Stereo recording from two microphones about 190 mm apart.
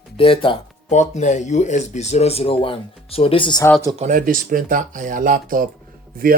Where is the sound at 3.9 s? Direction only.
40° right (ahead or behind).